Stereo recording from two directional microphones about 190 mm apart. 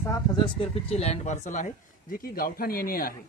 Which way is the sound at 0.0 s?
15° left (ahead or behind).